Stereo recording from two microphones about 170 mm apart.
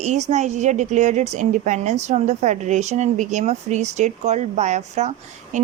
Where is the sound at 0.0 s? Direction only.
40° right (ahead or behind).